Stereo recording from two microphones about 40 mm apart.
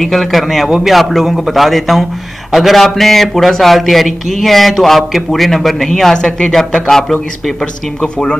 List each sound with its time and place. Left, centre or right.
0.0 s a man's voice: centre
6.1 s speech: left
6.9 s speech: centre
8.0 s speech: left